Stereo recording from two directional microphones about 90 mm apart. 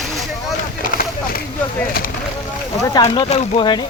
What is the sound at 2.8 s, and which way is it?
Speech, 50° left (ahead or behind).